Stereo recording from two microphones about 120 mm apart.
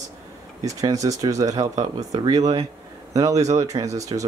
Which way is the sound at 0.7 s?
30° right (ahead or behind).